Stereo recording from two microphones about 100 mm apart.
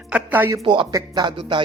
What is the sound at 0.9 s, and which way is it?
Speech, 35° right (ahead or behind).